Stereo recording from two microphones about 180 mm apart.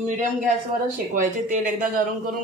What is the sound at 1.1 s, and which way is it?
Speech, 45° right (ahead or behind).